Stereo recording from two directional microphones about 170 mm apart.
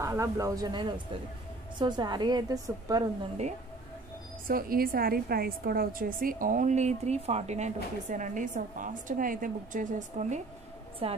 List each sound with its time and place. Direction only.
0.0 s a woman's voice: 20° right (ahead or behind)
4.5 s a woman's voice: 60° right (ahead or behind)
11.0 s a woman's voice: 35° right (ahead or behind)